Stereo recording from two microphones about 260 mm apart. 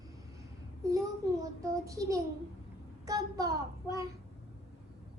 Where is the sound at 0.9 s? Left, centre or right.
Centre.